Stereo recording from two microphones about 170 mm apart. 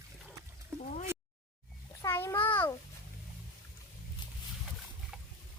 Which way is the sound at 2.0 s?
15° left (ahead or behind).